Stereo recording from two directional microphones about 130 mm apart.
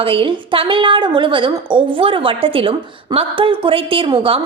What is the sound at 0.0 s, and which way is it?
A woman's voice, 45° right (ahead or behind).